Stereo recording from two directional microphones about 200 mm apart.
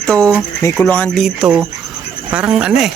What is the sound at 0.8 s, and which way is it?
Speech, 5° left (ahead or behind).